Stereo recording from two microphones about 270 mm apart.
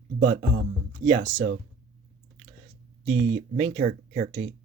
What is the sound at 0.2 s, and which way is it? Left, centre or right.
Speech, right.